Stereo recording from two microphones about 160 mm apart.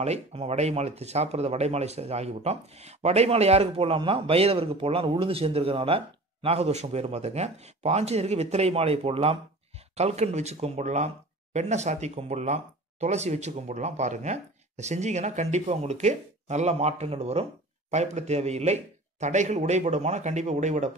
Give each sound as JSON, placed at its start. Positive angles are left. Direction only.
{"t": 0.0, "sound": "speech", "side_deg": -40}